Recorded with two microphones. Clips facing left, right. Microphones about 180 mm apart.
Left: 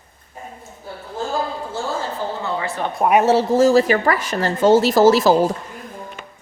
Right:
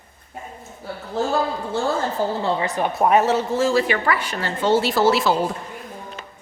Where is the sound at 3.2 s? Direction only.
35° left (ahead or behind).